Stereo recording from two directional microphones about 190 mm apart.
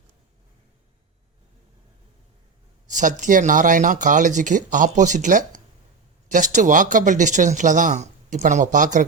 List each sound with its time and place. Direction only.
2.9 s speech: 40° right (ahead or behind)